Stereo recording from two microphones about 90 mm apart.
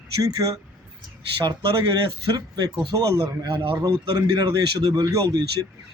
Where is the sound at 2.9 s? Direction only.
40° right (ahead or behind).